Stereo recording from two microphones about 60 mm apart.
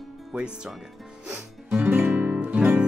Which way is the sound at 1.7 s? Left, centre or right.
Right.